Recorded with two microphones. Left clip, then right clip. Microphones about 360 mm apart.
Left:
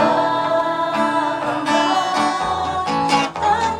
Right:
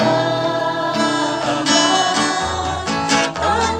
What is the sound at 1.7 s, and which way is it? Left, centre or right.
Music, centre.